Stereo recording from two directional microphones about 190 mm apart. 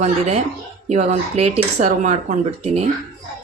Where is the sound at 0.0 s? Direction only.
35° right (ahead or behind).